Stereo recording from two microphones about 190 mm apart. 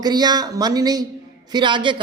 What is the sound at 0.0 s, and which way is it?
A man's voice, 20° right (ahead or behind).